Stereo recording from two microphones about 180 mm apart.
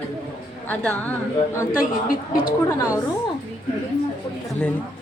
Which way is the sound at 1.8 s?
50° left (ahead or behind).